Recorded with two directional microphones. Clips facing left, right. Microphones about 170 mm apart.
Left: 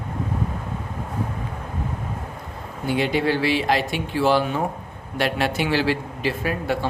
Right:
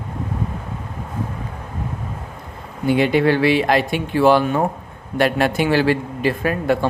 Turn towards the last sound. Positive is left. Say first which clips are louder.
# right 5 dB
turn(degrees=-50)  # may be behind; listen again after turning